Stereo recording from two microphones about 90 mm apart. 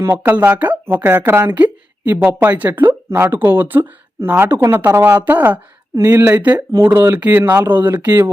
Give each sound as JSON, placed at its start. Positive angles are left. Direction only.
{"t": 0.2, "sound": "speech", "side_deg": -20}